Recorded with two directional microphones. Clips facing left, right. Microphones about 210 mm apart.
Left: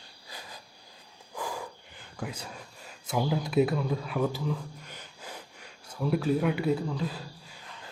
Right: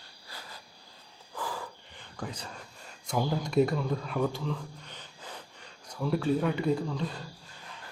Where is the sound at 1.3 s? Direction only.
15° left (ahead or behind).